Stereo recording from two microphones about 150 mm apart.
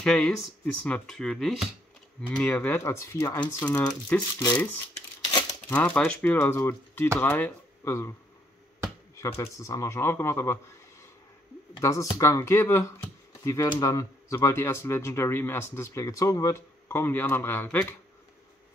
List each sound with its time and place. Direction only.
0.0 s speech: 5° left (ahead or behind)
4.9 s a sound: 30° left (ahead or behind)
5.7 s speech: 10° left (ahead or behind)
9.4 s speech: 20° left (ahead or behind)
11.8 s speech: 20° left (ahead or behind)